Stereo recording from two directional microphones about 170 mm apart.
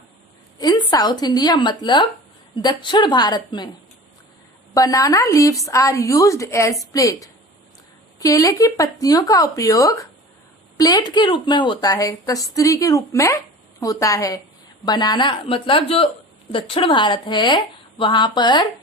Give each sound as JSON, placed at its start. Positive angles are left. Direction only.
{"t": 0.6, "sound": "a woman's voice", "side_deg": 25}
{"t": 4.7, "sound": "a woman's voice", "side_deg": 20}